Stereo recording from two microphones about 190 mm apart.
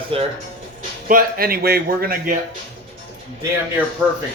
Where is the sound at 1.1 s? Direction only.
50° right (ahead or behind).